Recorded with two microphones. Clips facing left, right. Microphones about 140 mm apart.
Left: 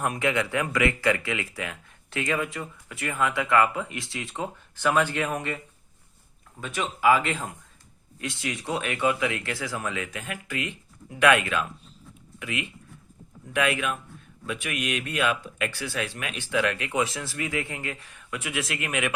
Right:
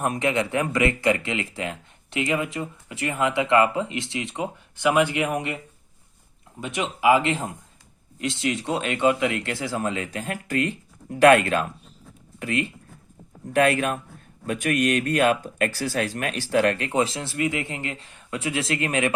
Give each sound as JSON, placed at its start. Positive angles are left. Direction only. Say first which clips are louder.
{"t": 0.0, "sound": "speech", "louder": "right 2 dB", "side_deg": -20}
{"t": 6.7, "sound": "speech", "louder": "right 2 dB", "side_deg": -25}